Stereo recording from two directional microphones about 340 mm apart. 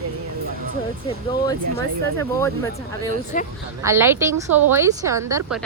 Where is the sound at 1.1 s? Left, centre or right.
Centre.